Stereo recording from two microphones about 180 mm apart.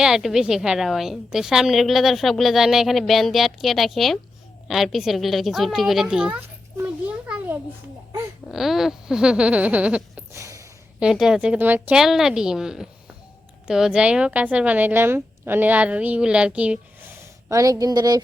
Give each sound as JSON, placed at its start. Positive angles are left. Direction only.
{"t": 0.0, "sound": "a woman's voice", "side_deg": 0}
{"t": 8.4, "sound": "a sound", "side_deg": 0}
{"t": 11.0, "sound": "a woman's voice", "side_deg": -5}
{"t": 17.5, "sound": "a woman's voice", "side_deg": -20}